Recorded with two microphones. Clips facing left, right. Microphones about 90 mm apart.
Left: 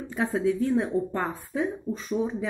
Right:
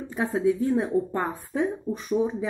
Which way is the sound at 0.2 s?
20° right (ahead or behind).